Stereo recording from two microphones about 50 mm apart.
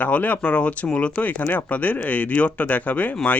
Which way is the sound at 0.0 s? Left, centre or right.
Left.